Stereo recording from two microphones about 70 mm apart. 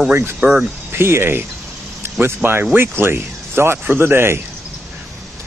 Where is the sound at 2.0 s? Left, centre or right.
Right.